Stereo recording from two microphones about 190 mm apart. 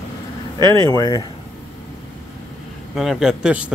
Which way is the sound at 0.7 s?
20° left (ahead or behind).